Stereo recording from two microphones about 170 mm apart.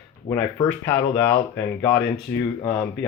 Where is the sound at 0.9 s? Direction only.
15° left (ahead or behind).